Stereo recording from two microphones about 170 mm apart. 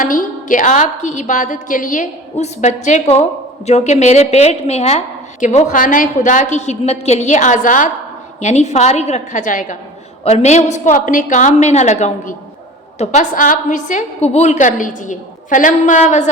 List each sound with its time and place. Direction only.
0.0 s a woman's voice: 50° left (ahead or behind)